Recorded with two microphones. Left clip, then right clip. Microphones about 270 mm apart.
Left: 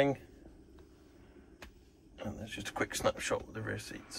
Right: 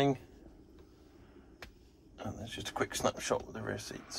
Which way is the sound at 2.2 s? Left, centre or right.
Centre.